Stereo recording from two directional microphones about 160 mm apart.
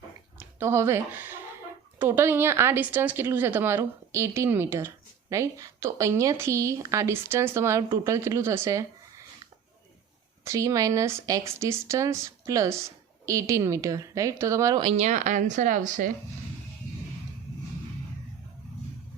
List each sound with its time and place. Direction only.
0.3 s a woman's voice: 15° right (ahead or behind)
10.4 s speech: 20° right (ahead or behind)
14.8 s a woman's voice: 45° right (ahead or behind)